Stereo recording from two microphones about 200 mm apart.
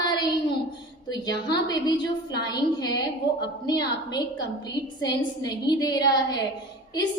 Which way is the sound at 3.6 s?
20° left (ahead or behind).